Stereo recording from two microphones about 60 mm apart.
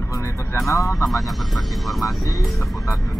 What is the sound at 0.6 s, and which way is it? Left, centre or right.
Speech, left.